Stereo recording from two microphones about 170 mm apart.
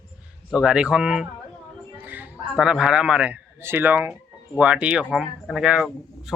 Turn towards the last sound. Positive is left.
turn(degrees=-5)  # may be behind; listen again after turning